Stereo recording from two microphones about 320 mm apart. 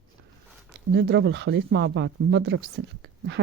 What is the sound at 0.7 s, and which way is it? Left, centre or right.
Speech, right.